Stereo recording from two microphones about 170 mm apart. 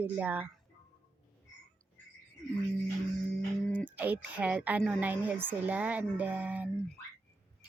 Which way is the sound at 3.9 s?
10° right (ahead or behind).